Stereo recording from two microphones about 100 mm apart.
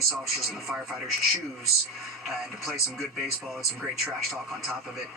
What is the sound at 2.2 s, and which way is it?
Speech, centre (ahead or behind).